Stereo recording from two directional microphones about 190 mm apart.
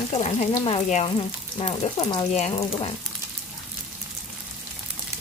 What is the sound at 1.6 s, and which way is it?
Speech, 25° left (ahead or behind).